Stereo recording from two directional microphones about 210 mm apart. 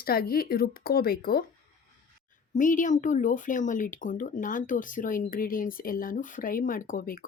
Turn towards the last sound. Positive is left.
turn(degrees=40)  # may be behind; listen again after turning